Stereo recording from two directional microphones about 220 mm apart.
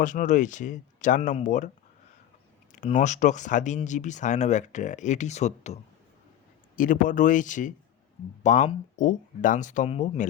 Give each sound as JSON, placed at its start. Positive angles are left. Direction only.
{"t": 0.0, "sound": "speech", "side_deg": 35}
{"t": 2.7, "sound": "speech", "side_deg": 35}